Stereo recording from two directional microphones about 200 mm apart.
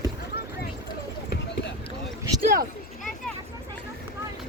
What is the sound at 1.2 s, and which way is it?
Run, 60° left (ahead or behind).